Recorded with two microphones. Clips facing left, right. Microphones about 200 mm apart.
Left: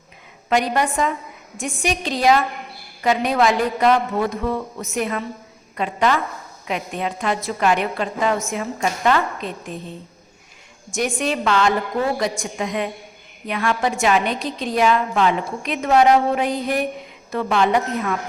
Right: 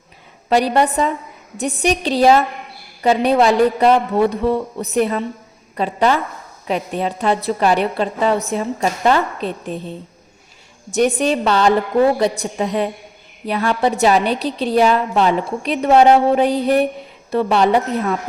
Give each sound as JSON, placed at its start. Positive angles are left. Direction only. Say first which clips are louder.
{"t": 0.5, "sound": "a woman's voice", "louder": "right 4 dB", "side_deg": -35}
{"t": 10.9, "sound": "a woman's voice", "louder": "right 6 dB", "side_deg": -35}